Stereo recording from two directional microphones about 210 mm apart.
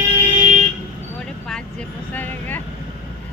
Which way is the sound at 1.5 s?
5° left (ahead or behind).